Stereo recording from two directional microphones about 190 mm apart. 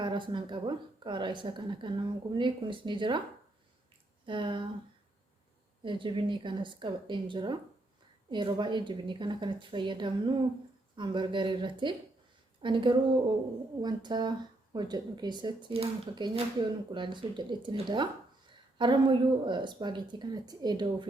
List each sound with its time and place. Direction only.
0.0 s speech: 25° right (ahead or behind)
4.3 s speech: 25° right (ahead or behind)
5.8 s speech: 25° right (ahead or behind)